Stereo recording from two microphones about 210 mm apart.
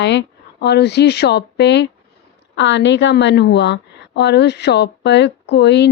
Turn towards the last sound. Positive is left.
turn(degrees=55)  # may be behind; listen again after turning